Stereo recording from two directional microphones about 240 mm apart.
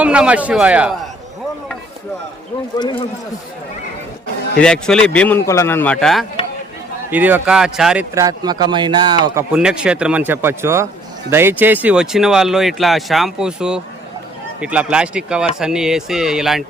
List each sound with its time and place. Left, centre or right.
0.0 s speech: centre
2.7 s a man's voice: centre
4.6 s speech: centre
8.1 s speech: centre